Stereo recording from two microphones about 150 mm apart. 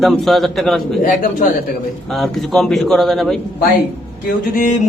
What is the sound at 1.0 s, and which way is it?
Speech, 60° left (ahead or behind).